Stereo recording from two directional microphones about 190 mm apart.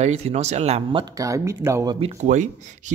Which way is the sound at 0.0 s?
35° right (ahead or behind).